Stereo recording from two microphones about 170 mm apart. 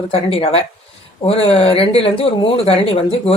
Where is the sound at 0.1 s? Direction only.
35° left (ahead or behind).